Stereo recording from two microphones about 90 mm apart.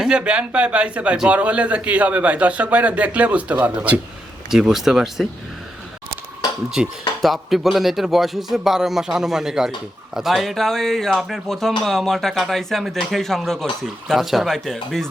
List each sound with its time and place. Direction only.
0.0 s a man's voice: 10° right (ahead or behind)
4.4 s speech: 5° right (ahead or behind)
6.8 s a man's voice: 10° right (ahead or behind)